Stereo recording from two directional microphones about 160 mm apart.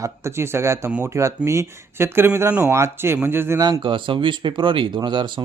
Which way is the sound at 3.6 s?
30° right (ahead or behind).